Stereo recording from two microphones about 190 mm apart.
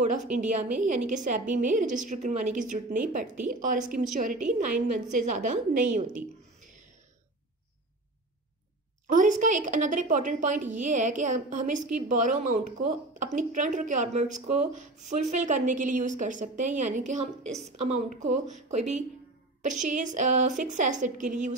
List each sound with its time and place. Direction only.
0.3 s a woman's voice: 40° right (ahead or behind)
9.1 s a woman's voice: 40° right (ahead or behind)